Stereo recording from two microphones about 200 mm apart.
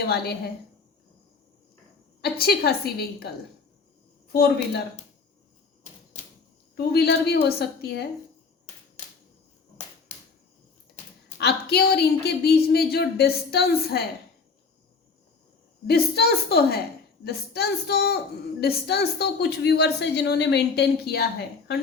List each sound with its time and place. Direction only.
0.1 s speech: 50° left (ahead or behind)
2.2 s speech: 50° left (ahead or behind)
4.3 s speech: 50° left (ahead or behind)
6.7 s a woman's voice: 55° left (ahead or behind)
11.3 s speech: 55° left (ahead or behind)
15.9 s a woman's voice: 55° left (ahead or behind)